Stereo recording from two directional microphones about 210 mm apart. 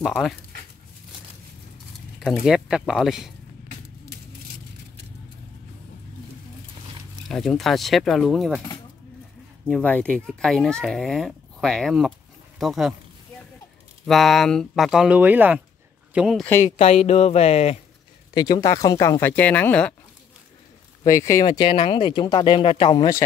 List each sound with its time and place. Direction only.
2.1 s speech: centre (ahead or behind)
7.2 s speech: centre (ahead or behind)
9.7 s speech: 5° left (ahead or behind)
14.0 s speech: centre (ahead or behind)
16.7 s speech: 30° left (ahead or behind)
18.3 s speech: 20° left (ahead or behind)
21.0 s speech: 15° left (ahead or behind)